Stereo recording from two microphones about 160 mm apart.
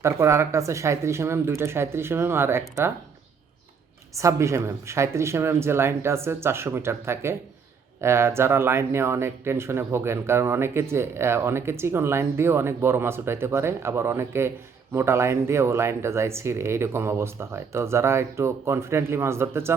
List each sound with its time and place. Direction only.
0.0 s speech: 20° right (ahead or behind)
4.1 s speech: 20° right (ahead or behind)